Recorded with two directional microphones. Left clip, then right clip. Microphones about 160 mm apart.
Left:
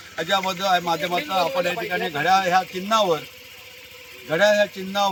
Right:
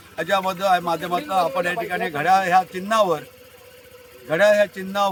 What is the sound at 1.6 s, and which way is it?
A man's voice, 30° right (ahead or behind).